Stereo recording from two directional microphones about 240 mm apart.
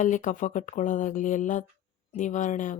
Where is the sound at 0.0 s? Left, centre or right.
Left.